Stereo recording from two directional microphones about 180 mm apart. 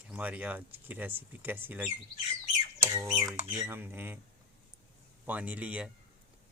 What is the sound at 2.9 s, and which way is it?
Speech, 15° right (ahead or behind).